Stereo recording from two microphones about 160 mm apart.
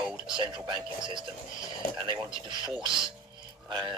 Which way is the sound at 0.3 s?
30° right (ahead or behind).